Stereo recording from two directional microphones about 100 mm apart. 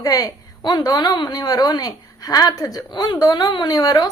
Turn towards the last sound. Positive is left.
turn(degrees=40)  # may be behind; listen again after turning